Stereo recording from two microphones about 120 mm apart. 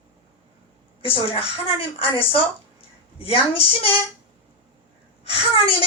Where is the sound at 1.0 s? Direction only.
50° left (ahead or behind).